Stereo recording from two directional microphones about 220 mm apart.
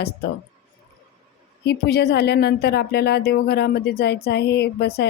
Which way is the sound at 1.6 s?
45° left (ahead or behind).